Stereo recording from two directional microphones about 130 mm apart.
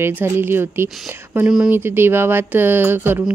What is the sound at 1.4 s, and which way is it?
Speech, 5° right (ahead or behind).